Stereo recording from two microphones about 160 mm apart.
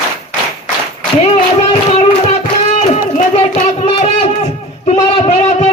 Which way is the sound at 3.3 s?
45° left (ahead or behind).